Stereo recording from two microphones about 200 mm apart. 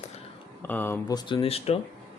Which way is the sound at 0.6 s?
10° left (ahead or behind).